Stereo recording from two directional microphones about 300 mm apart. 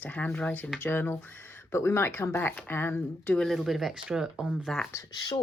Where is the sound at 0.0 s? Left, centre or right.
Centre.